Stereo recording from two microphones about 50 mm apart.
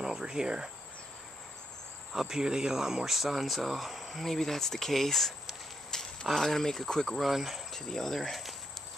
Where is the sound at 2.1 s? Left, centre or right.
Centre.